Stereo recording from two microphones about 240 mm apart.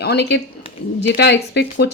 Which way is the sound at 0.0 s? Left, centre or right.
Left.